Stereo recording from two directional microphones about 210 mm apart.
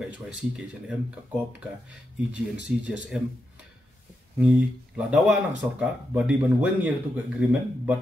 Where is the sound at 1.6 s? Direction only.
5° right (ahead or behind).